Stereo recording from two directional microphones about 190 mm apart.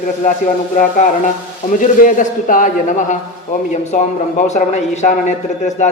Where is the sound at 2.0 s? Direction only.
45° left (ahead or behind).